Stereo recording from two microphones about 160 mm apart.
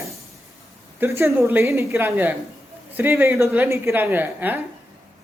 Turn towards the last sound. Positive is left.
turn(degrees=-10)  # may be behind; listen again after turning